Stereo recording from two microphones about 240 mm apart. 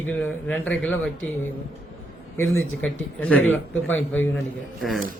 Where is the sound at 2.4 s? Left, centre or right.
Left.